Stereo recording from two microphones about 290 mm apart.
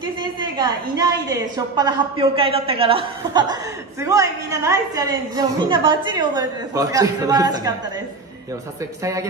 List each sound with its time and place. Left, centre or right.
0.2 s a woman's voice: centre
9.0 s a woman's voice: centre